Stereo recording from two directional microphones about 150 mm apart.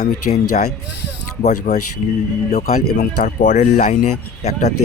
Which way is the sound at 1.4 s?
50° left (ahead or behind).